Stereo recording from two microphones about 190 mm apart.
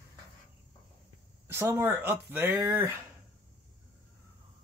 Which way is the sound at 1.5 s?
10° right (ahead or behind).